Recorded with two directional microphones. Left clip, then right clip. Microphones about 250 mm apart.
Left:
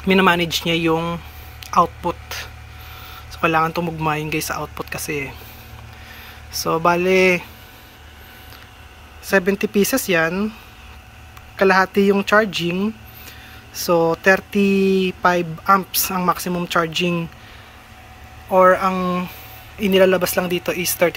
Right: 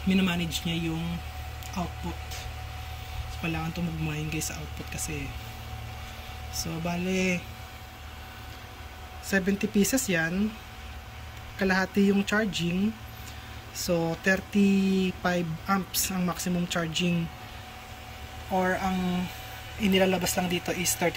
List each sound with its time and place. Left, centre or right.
0.1 s speech: centre
1.6 s a sound: centre
3.4 s speech: centre
6.5 s speech: centre
9.3 s speech: centre
11.5 s speech: centre
18.6 s speech: left
19.8 s speech: centre